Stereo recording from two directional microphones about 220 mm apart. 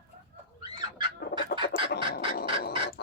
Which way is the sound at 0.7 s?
20° right (ahead or behind).